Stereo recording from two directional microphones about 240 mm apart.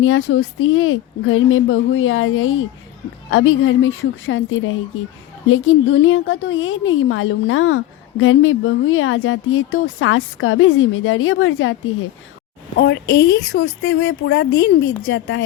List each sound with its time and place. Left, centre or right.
0.0 s a woman's voice: left
13.1 s speech: centre
13.3 s speech: left